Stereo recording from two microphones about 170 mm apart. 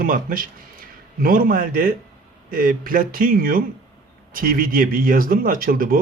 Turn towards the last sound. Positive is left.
turn(degrees=-60)  # may be behind; listen again after turning